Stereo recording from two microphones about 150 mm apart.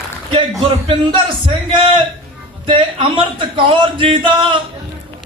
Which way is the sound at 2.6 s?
35° right (ahead or behind).